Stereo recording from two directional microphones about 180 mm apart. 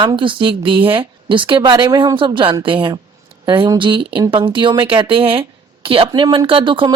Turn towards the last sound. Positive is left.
turn(degrees=-30)  # may be behind; listen again after turning